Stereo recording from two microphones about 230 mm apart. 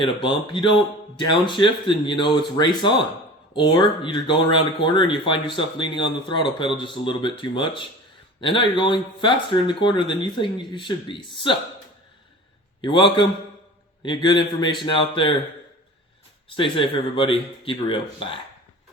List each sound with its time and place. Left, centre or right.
0.0 s speech: left
12.8 s speech: left
16.5 s speech: left